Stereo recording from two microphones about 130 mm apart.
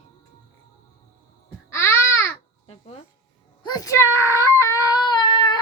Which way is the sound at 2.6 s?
45° left (ahead or behind).